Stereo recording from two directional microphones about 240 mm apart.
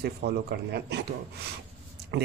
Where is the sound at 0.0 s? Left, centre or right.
Right.